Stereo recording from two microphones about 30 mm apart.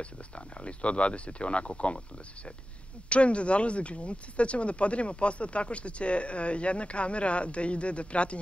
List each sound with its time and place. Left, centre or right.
0.6 s speech: left
3.1 s speech: left